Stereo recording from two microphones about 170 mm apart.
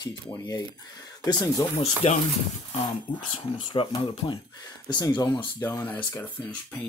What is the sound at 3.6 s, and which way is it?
Speech, 25° left (ahead or behind).